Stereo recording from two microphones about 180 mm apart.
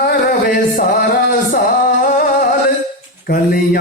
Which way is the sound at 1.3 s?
55° left (ahead or behind).